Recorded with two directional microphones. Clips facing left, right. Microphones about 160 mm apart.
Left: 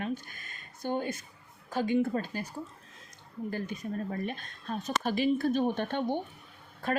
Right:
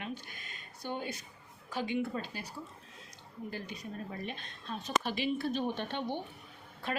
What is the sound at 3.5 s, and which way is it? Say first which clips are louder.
Speech: left 7 dB; 50° left (ahead or behind).